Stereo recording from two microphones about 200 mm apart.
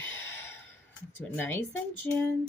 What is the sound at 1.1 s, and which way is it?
Speech, 10° left (ahead or behind).